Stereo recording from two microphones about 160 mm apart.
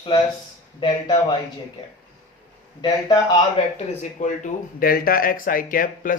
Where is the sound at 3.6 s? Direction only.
40° left (ahead or behind).